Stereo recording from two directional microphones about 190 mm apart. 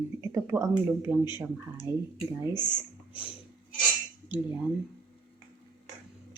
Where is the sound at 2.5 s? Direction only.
20° left (ahead or behind).